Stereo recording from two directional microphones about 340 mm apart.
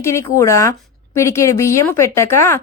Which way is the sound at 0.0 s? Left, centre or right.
Centre.